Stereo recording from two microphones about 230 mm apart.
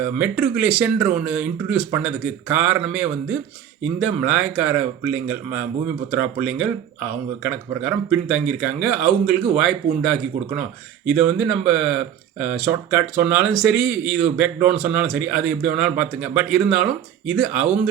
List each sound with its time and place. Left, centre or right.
0.2 s a man's voice: centre